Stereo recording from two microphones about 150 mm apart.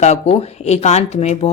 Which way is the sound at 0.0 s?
45° left (ahead or behind).